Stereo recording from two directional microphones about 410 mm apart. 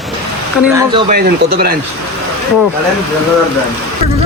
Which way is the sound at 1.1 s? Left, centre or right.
Right.